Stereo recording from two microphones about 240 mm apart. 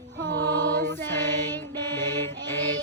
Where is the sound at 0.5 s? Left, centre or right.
Centre.